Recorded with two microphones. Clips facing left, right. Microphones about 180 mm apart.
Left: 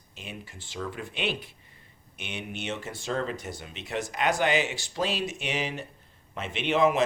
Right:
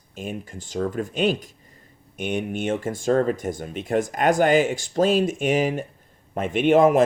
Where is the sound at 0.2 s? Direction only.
45° right (ahead or behind).